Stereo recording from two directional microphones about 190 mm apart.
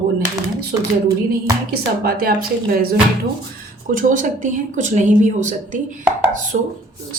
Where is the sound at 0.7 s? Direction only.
15° right (ahead or behind).